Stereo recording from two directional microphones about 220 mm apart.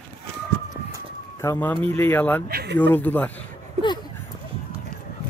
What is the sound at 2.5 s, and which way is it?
Speech, 45° right (ahead or behind).